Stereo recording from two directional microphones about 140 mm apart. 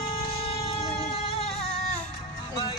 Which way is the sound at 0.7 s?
45° left (ahead or behind).